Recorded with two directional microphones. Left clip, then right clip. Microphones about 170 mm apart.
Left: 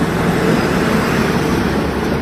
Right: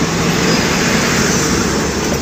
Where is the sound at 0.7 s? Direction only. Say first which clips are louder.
Right 1 dB; 20° left (ahead or behind).